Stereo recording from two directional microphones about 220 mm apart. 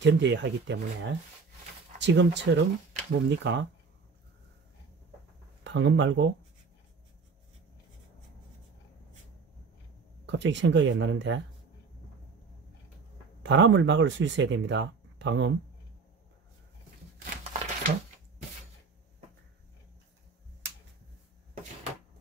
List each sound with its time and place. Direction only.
0.0 s speech: 50° right (ahead or behind)
5.6 s speech: 55° right (ahead or behind)
10.2 s speech: 55° right (ahead or behind)
13.4 s speech: 55° right (ahead or behind)
17.2 s a sound: 35° right (ahead or behind)